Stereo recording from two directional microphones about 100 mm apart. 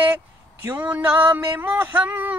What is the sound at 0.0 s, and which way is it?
Speech, 20° right (ahead or behind).